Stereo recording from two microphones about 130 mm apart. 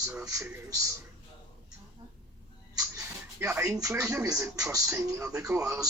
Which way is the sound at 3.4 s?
15° right (ahead or behind).